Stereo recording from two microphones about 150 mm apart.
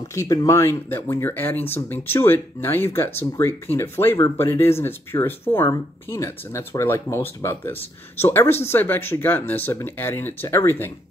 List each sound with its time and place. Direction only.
0.1 s speech: 20° left (ahead or behind)